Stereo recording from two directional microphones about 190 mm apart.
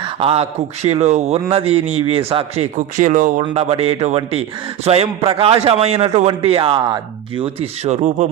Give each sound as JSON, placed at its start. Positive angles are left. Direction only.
{"t": 0.0, "sound": "speech", "side_deg": -30}
{"t": 2.7, "sound": "speech", "side_deg": -45}